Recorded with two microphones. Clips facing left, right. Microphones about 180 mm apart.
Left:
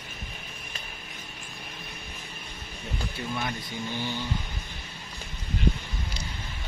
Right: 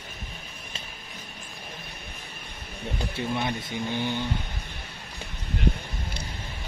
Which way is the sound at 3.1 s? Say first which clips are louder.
Right 5 dB; 20° right (ahead or behind).